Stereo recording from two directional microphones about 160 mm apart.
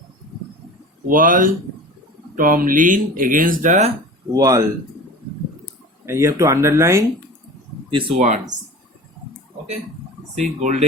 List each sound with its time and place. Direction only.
1.0 s speech: 60° right (ahead or behind)
4.4 s speech: 25° right (ahead or behind)
6.1 s speech: 15° right (ahead or behind)
7.9 s speech: 30° right (ahead or behind)
10.3 s speech: 50° right (ahead or behind)